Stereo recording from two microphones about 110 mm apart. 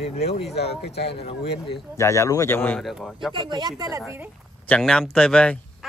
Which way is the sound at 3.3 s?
45° right (ahead or behind).